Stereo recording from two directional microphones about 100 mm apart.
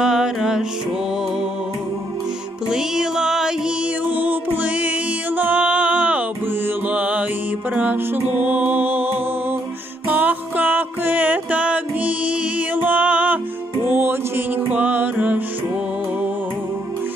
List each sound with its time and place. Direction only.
0.0 s music: 5° right (ahead or behind)
2.7 s music: 5° right (ahead or behind)